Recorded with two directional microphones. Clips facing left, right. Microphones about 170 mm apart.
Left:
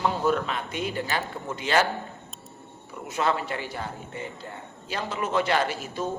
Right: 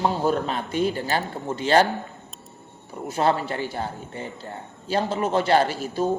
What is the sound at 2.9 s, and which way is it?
A woman's voice, 35° right (ahead or behind).